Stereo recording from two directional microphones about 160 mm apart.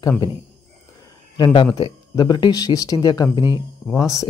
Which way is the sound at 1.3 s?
30° left (ahead or behind).